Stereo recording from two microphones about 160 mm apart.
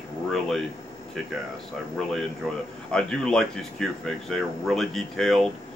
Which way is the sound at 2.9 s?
5° left (ahead or behind).